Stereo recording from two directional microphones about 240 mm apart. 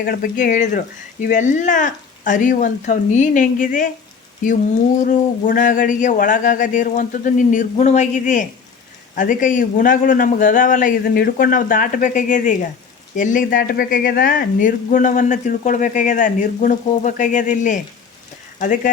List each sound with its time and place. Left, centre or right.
0.0 s speech: left
4.9 s speech: left